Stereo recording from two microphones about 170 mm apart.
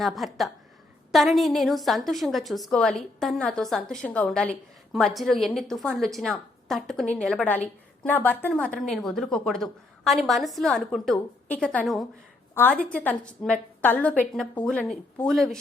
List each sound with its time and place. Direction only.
0.0 s a woman's voice: centre (ahead or behind)